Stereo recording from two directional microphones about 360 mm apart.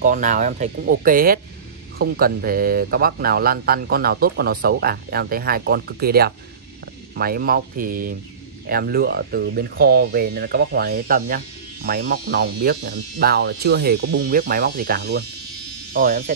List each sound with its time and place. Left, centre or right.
0.0 s speech: right